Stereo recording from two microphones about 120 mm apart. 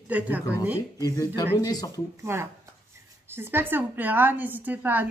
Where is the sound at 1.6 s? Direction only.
30° left (ahead or behind).